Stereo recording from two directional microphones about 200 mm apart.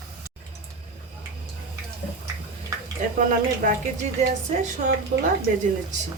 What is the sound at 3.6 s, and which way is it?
Speech, 40° right (ahead or behind).